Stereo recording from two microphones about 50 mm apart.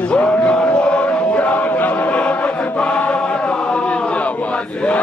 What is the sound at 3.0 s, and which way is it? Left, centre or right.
Choir, left.